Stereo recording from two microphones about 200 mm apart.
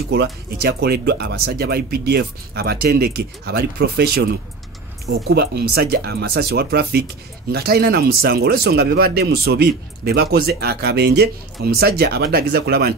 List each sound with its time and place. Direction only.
0.1 s speech: 55° right (ahead or behind)
5.3 s speech: 55° right (ahead or behind)